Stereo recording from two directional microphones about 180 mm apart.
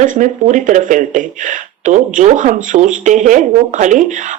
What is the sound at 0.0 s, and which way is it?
Speech, 45° right (ahead or behind).